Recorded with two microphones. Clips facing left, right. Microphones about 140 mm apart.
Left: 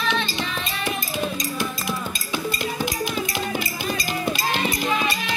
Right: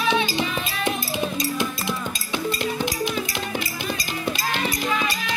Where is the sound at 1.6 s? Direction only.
25° right (ahead or behind).